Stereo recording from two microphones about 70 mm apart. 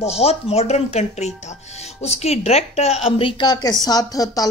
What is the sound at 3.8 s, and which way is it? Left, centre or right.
Speech, left.